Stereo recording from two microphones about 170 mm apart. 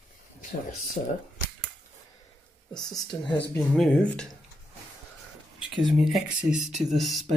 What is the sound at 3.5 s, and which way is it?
Speech, 5° left (ahead or behind).